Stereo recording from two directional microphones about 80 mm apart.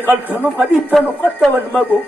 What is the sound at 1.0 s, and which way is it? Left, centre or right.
Speech, left.